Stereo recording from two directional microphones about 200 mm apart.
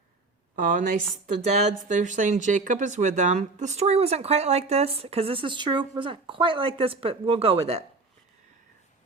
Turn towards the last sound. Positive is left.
turn(degrees=-30)  # may be behind; listen again after turning